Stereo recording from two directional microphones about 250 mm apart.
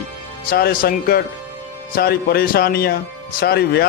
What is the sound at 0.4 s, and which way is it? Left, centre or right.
Speech, left.